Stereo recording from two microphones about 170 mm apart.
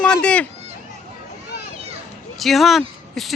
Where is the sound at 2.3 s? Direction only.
Centre (ahead or behind).